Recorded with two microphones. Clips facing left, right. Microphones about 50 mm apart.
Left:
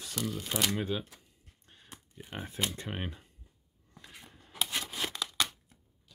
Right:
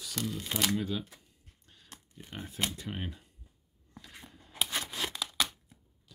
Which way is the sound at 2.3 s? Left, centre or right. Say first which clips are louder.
Left 1 dB; left.